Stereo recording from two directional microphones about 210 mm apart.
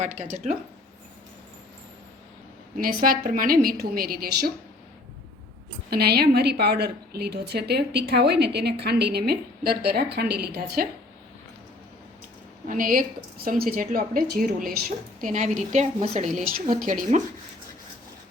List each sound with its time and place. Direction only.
0.0 s a woman's voice: 35° right (ahead or behind)
3.0 s a woman's voice: 40° right (ahead or behind)
5.9 s a woman's voice: 50° right (ahead or behind)
12.6 s a woman's voice: 40° right (ahead or behind)